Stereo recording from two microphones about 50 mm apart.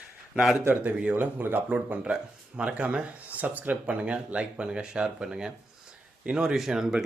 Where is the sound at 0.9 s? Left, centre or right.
Right.